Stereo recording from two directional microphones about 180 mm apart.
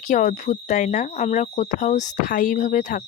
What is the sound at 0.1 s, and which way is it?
Speech, 45° left (ahead or behind).